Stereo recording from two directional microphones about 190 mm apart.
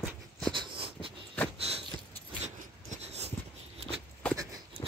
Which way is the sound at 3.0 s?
35° right (ahead or behind).